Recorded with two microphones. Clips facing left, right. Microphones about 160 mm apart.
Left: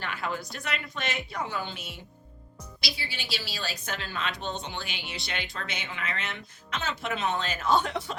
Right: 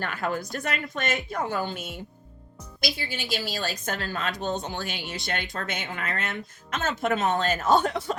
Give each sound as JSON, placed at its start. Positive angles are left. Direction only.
{"t": 0.0, "sound": "speech", "side_deg": -45}